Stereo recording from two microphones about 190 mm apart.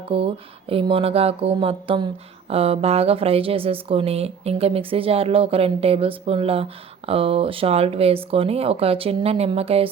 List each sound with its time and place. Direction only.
0.1 s speech: 30° right (ahead or behind)